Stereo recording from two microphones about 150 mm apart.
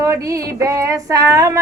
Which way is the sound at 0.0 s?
20° right (ahead or behind).